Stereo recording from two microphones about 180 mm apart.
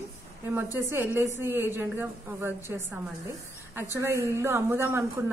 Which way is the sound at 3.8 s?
15° right (ahead or behind).